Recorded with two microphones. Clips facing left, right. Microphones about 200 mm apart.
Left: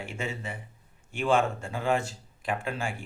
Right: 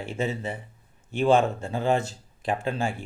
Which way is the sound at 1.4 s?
35° right (ahead or behind).